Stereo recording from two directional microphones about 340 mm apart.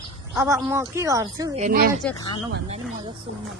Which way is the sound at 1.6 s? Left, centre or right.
Right.